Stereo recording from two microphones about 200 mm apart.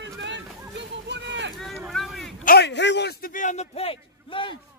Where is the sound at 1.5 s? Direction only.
Centre (ahead or behind).